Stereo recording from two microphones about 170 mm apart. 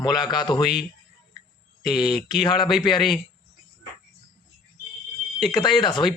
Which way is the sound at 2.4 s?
30° left (ahead or behind).